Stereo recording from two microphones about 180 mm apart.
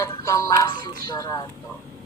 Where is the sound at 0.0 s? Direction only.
15° left (ahead or behind).